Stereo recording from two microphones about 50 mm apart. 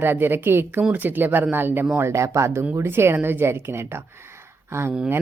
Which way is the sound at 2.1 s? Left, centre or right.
Right.